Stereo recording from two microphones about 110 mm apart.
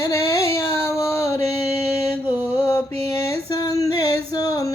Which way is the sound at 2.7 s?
25° left (ahead or behind).